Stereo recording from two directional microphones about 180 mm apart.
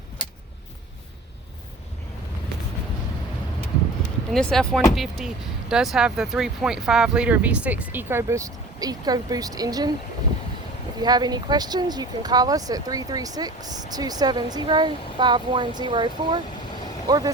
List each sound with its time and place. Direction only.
4.3 s speech: 5° left (ahead or behind); by 9.9 s 20° right (ahead or behind)
11.0 s speech: 25° right (ahead or behind)